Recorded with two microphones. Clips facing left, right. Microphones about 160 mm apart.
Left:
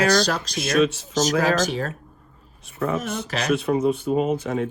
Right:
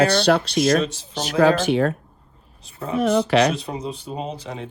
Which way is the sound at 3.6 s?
55° left (ahead or behind).